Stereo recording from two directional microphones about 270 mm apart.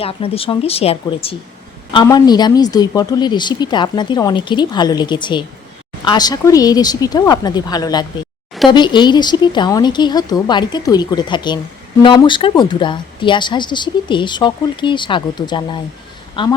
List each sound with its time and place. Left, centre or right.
0.0 s speech: left